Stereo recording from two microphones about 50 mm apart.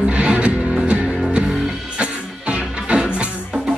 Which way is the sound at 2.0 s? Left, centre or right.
Right.